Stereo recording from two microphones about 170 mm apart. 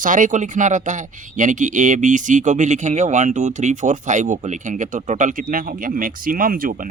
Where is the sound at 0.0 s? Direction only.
50° right (ahead or behind).